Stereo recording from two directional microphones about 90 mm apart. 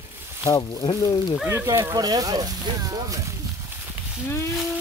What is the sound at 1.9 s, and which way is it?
Speech, 45° right (ahead or behind).